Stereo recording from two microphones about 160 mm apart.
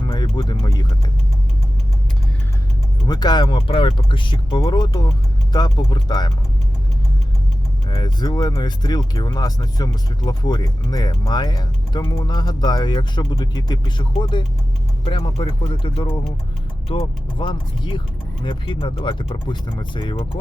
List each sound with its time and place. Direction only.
0.0 s speech: 25° left (ahead or behind)
3.1 s speech: 25° left (ahead or behind)
7.9 s speech: 25° left (ahead or behind)